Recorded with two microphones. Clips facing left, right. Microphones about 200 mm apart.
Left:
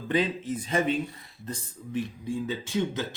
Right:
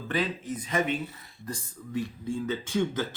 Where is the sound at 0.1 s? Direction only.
20° left (ahead or behind).